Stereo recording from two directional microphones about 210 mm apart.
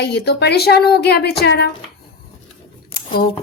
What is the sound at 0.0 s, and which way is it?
Speech, 50° left (ahead or behind).